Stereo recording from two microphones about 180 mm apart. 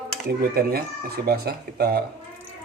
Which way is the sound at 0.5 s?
60° right (ahead or behind).